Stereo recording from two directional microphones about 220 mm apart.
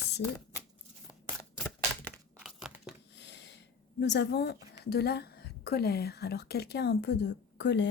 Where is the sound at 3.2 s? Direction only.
50° left (ahead or behind).